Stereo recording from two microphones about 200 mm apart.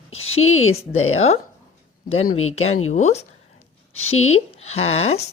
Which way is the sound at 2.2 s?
90° left.